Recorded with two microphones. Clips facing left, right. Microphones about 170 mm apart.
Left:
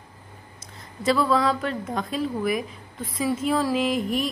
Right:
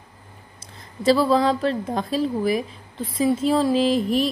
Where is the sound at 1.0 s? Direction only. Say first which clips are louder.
Right 4 dB; 30° right (ahead or behind).